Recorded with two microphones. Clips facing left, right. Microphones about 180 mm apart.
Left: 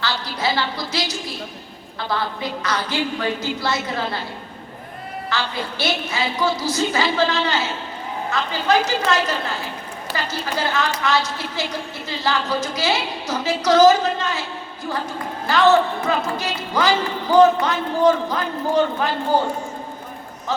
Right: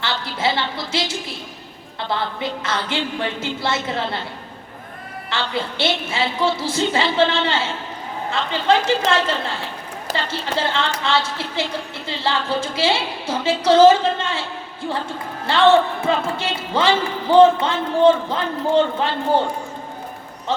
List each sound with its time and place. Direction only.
0.0 s a woman's voice: 25° right (ahead or behind)
5.3 s a woman's voice: 25° right (ahead or behind)
15.4 s a woman's voice: 30° right (ahead or behind)